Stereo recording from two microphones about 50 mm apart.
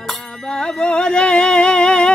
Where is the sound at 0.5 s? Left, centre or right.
Centre.